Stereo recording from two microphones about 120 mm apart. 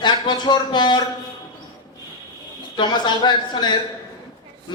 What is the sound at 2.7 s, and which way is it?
Speech, 40° left (ahead or behind).